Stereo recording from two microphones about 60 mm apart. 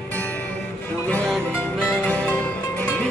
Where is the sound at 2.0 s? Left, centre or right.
Left.